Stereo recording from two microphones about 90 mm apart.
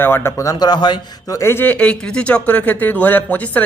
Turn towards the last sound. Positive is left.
turn(degrees=20)  # may be behind; listen again after turning